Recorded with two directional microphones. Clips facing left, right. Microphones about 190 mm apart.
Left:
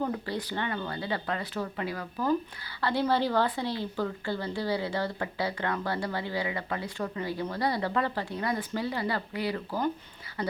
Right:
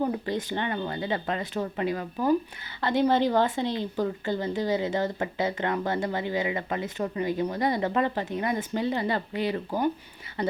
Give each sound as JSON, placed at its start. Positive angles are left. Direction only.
{"t": 0.0, "sound": "a woman's voice", "side_deg": -20}